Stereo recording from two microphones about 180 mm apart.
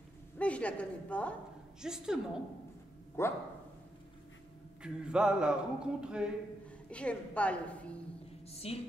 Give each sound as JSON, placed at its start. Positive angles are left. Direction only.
{"t": 0.4, "sound": "a woman's voice", "side_deg": 5}
{"t": 1.8, "sound": "a sound", "side_deg": -5}
{"t": 3.2, "sound": "a woman's voice", "side_deg": 15}
{"t": 4.8, "sound": "a sound", "side_deg": -5}
{"t": 6.9, "sound": "a woman's voice", "side_deg": 5}
{"t": 8.6, "sound": "a woman's voice", "side_deg": 35}